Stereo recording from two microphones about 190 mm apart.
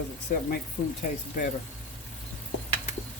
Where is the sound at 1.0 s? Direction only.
45° left (ahead or behind).